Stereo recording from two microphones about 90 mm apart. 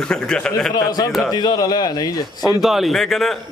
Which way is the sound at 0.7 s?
45° left (ahead or behind).